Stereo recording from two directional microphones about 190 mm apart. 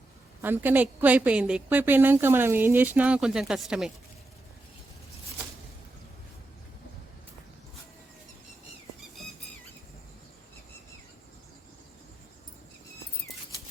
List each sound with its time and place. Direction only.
0.4 s a woman's voice: 10° right (ahead or behind)